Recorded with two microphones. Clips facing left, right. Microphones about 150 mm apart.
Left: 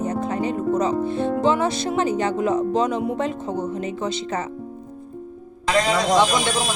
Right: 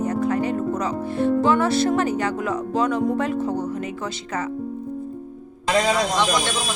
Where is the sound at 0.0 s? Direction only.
20° left (ahead or behind).